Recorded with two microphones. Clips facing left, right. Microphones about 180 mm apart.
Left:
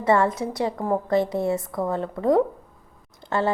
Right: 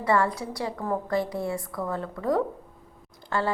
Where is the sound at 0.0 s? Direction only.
25° left (ahead or behind).